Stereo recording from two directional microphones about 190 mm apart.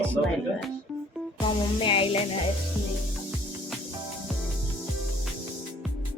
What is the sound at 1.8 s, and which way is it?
Music, 30° left (ahead or behind).